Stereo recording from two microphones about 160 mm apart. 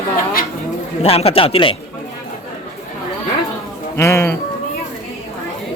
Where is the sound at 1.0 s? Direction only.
40° left (ahead or behind).